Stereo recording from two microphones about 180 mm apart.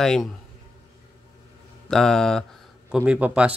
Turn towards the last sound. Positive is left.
turn(degrees=-5)  # may be behind; listen again after turning